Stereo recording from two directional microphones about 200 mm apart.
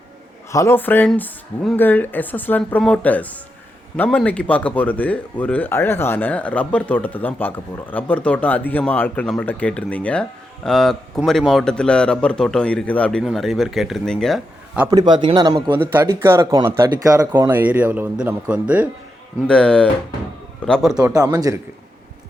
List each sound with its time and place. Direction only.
0.5 s speech: 15° left (ahead or behind)
14.8 s speech: 20° right (ahead or behind)
19.4 s speech: 5° left (ahead or behind)
21.2 s speech: 20° right (ahead or behind)